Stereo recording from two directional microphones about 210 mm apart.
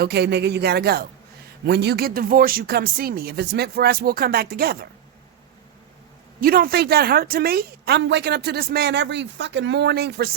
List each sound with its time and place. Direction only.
0.0 s a woman's voice: 50° right (ahead or behind)
6.4 s a woman's voice: 45° right (ahead or behind)